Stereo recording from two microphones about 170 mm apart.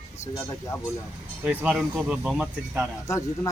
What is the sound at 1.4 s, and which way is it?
Speech, 10° right (ahead or behind).